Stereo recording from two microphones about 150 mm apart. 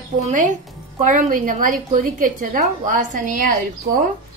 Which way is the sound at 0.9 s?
60° right (ahead or behind).